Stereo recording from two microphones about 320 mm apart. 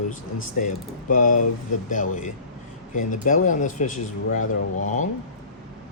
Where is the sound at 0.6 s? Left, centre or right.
Left.